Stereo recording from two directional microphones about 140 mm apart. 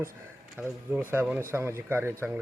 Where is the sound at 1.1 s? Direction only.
15° right (ahead or behind).